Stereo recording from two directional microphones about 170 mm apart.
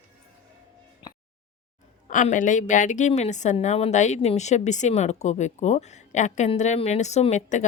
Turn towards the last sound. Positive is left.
turn(degrees=45)  # may be behind; listen again after turning